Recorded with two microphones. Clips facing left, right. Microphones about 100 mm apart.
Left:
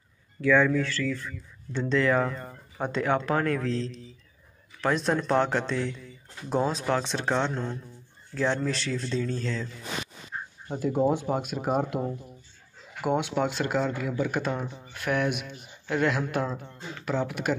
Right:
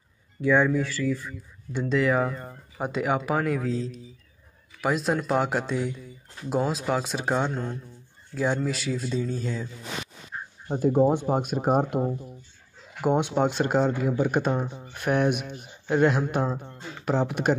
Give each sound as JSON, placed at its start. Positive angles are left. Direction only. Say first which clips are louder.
{"t": 0.4, "sound": "speech", "louder": "even", "side_deg": -15}
{"t": 10.7, "sound": "speech", "louder": "right 4 dB", "side_deg": -35}
{"t": 12.0, "sound": "speech", "louder": "right 4 dB", "side_deg": -15}
{"t": 17.0, "sound": "speech", "louder": "right 4 dB", "side_deg": -30}